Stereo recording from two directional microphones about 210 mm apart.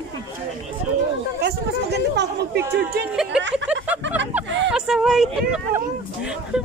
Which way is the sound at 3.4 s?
55° right (ahead or behind).